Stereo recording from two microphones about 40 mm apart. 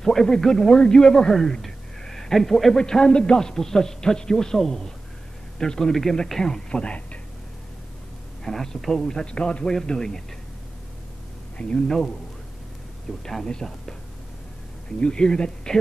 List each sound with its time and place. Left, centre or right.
0.0 s speech: centre
2.8 s a man's voice: left
3.3 s a man's voice: centre
6.7 s speech: left
8.5 s a man's voice: centre; by 9.8 s left
9.8 s a man's voice: centre
11.6 s a man's voice: centre
13.2 s a man's voice: centre